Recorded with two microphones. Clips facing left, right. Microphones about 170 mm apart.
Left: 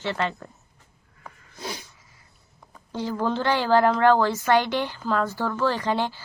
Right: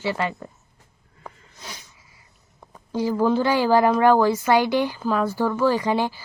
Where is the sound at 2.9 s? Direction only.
10° right (ahead or behind).